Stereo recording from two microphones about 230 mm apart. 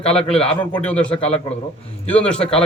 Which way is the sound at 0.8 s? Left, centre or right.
Centre.